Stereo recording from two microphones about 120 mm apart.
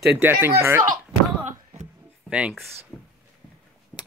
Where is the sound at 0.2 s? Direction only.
15° right (ahead or behind).